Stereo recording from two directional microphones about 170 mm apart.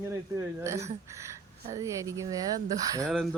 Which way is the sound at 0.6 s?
15° right (ahead or behind).